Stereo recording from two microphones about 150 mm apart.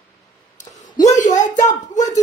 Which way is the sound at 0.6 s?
55° left (ahead or behind).